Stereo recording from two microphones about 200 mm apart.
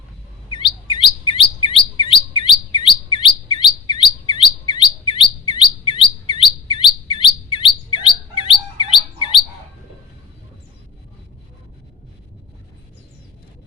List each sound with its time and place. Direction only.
0.5 s chirp: 25° left (ahead or behind)